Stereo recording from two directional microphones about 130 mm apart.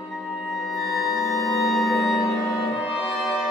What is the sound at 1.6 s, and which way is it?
Music, centre (ahead or behind).